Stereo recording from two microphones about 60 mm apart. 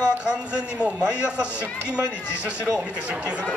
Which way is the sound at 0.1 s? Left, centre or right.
Centre.